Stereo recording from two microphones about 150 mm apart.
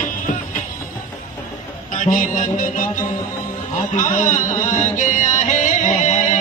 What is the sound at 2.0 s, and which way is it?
Music, 60° left (ahead or behind).